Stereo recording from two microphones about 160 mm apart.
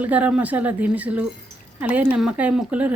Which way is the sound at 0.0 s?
10° right (ahead or behind).